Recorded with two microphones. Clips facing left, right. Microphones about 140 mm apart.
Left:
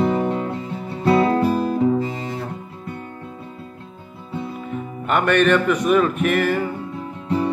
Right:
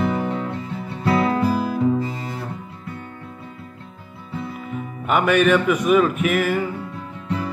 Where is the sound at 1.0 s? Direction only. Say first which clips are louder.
Left 3 dB; 30° left (ahead or behind).